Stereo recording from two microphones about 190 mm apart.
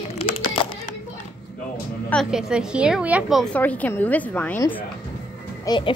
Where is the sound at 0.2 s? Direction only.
30° left (ahead or behind).